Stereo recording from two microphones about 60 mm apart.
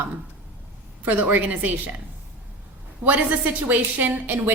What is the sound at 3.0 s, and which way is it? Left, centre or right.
A woman's voice, right.